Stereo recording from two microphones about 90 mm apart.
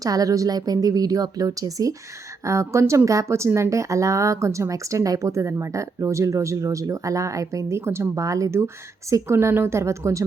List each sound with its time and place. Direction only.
0.0 s speech: 40° right (ahead or behind)